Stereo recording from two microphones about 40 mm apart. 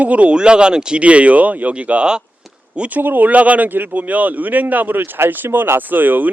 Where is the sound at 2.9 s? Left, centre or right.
Right.